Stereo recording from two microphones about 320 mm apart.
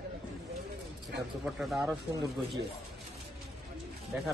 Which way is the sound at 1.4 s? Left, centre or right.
Centre.